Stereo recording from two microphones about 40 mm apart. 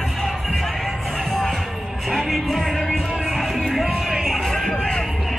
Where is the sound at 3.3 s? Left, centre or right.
Centre.